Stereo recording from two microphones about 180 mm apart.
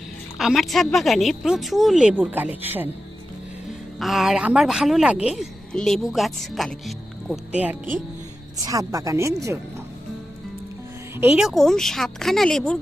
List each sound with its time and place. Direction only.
0.3 s speech: centre (ahead or behind)
4.0 s a woman's voice: centre (ahead or behind); by 9.3 s 15° right (ahead or behind)
11.2 s speech: 5° right (ahead or behind)